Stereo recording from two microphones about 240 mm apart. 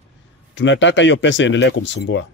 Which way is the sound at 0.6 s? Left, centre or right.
Left.